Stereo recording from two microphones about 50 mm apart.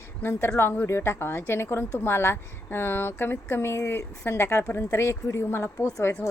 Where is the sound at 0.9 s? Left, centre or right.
Left.